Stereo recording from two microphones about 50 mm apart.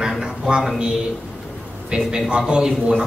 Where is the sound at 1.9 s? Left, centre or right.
Right.